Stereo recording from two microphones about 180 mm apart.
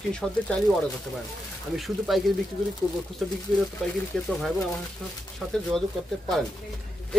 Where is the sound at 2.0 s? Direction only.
Centre (ahead or behind).